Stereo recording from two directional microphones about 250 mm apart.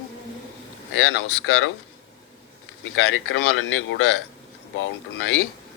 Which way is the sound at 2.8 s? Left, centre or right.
Left.